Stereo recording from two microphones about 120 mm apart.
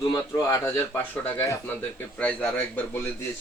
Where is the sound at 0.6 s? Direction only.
15° left (ahead or behind).